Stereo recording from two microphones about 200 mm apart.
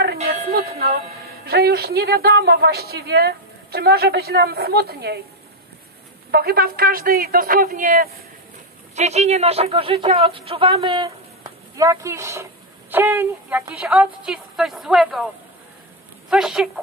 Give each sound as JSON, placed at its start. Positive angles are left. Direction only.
{"t": 0.3, "sound": "music", "side_deg": -50}
{"t": 1.4, "sound": "a woman's voice", "side_deg": -50}
{"t": 6.3, "sound": "a woman's voice", "side_deg": -50}
{"t": 16.3, "sound": "a woman's voice", "side_deg": 0}